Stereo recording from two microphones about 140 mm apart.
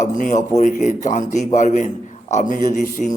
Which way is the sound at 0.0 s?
65° left (ahead or behind).